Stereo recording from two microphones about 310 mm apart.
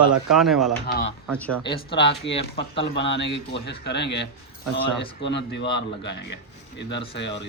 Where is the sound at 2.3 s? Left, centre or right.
Left.